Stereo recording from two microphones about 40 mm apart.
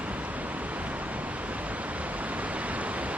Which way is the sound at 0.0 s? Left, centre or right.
Right.